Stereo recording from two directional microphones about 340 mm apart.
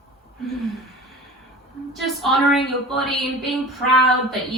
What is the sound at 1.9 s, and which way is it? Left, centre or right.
A woman's voice, centre.